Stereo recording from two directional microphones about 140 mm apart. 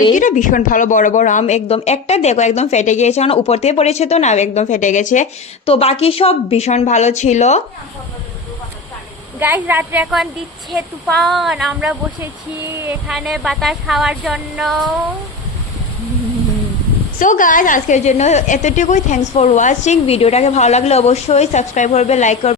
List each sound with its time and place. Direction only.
0.1 s a woman's voice: 65° left (ahead or behind)
5.6 s a woman's voice: 45° left (ahead or behind)
9.4 s a woman's voice: 15° right (ahead or behind)
10.7 s speech: centre (ahead or behind)
13.1 s speech: centre (ahead or behind)
17.2 s a woman's voice: 70° left (ahead or behind); by 22.5 s 55° left (ahead or behind)